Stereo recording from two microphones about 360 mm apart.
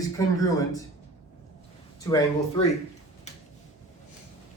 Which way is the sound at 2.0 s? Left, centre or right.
Centre.